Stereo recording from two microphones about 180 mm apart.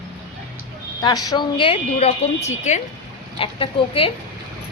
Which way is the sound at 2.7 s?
40° left (ahead or behind).